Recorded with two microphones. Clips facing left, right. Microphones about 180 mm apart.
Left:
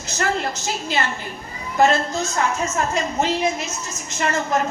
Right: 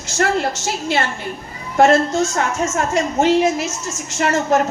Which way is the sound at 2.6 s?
80° right.